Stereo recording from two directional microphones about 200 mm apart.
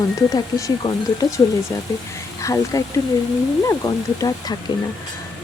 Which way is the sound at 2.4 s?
15° left (ahead or behind).